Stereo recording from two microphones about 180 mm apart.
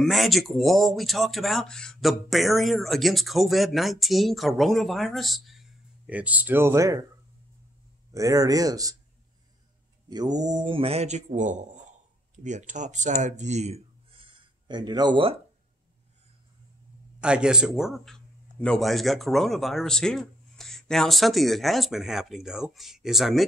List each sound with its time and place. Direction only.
0.0 s speech: centre (ahead or behind); by 7.1 s 20° right (ahead or behind)
8.1 s speech: 20° right (ahead or behind)
10.0 s speech: 20° right (ahead or behind)
17.2 s speech: 5° right (ahead or behind)